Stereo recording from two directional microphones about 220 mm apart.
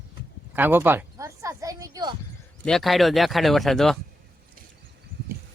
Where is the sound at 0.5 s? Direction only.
10° right (ahead or behind).